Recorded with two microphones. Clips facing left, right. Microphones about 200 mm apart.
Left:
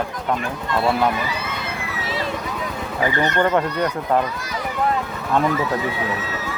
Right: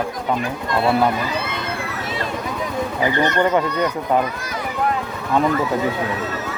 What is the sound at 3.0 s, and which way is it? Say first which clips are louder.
Speech: right 1 dB; centre (ahead or behind).